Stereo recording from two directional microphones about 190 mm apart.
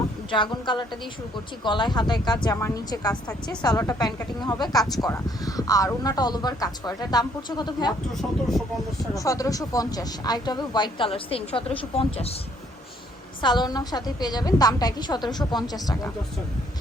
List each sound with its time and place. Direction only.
0.3 s speech: 25° left (ahead or behind)
8.2 s speech: centre (ahead or behind)
9.1 s speech: 15° left (ahead or behind)
13.4 s speech: 25° left (ahead or behind)